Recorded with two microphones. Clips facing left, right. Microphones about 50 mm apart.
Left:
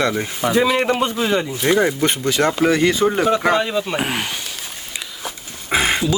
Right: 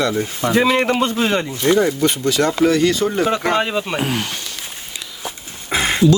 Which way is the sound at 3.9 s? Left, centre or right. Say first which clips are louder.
Right 1 dB; left.